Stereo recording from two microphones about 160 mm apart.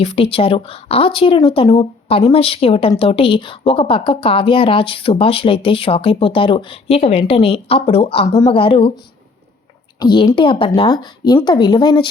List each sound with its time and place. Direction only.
0.0 s speech: 35° left (ahead or behind)
10.0 s speech: 25° left (ahead or behind)